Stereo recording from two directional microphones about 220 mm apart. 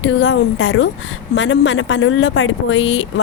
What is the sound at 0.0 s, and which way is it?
Speech, 55° left (ahead or behind).